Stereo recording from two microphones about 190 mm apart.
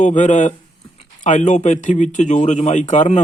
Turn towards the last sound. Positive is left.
turn(degrees=40)  # may be behind; listen again after turning